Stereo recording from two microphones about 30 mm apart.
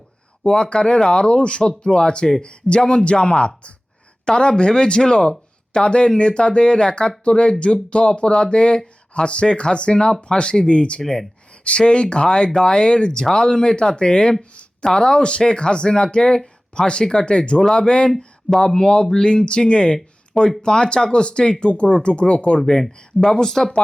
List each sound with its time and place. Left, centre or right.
0.4 s speech: left
18.5 s speech: left
21.6 s speech: left
22.5 s speech: left
23.4 s speech: centre